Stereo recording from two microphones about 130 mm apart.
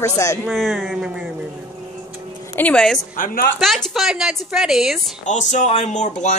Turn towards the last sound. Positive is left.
turn(degrees=65)  # may be behind; listen again after turning